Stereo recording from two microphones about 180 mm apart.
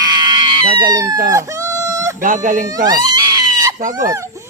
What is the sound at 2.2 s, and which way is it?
Speech, 45° right (ahead or behind).